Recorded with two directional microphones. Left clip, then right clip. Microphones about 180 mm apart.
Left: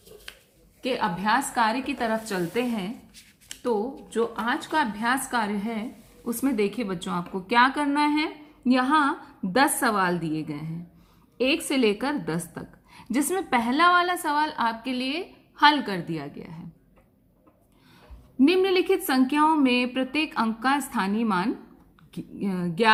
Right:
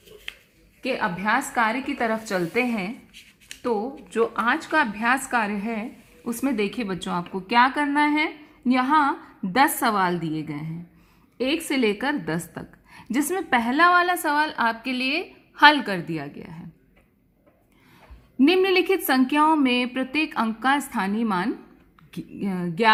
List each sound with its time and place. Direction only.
0.8 s a woman's voice: 35° right (ahead or behind)
4.1 s a woman's voice: 40° right (ahead or behind)
18.3 s a woman's voice: 40° right (ahead or behind)